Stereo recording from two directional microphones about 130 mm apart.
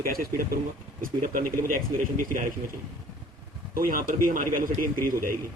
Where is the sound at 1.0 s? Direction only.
90° right.